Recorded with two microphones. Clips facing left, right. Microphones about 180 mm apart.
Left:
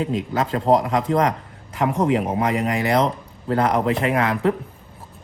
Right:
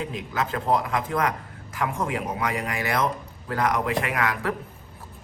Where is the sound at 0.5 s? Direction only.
35° left (ahead or behind).